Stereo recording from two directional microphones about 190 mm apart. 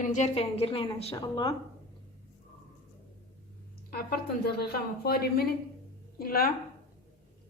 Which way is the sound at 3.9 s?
55° left (ahead or behind).